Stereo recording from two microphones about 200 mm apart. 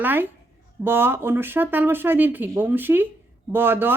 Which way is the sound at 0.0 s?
10° right (ahead or behind).